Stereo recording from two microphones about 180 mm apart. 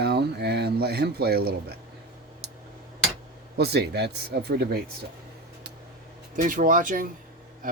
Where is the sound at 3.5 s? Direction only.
65° right (ahead or behind).